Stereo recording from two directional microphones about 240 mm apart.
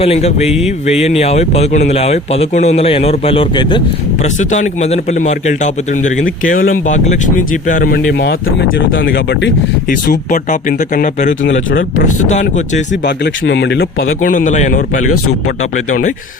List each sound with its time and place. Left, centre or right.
0.0 s speech: left
4.4 s a man's voice: left
8.9 s a man's voice: left
10.1 s a man's voice: left
12.9 s a man's voice: left